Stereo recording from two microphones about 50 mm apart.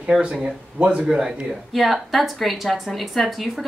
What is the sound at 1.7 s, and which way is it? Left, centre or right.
Speech, centre.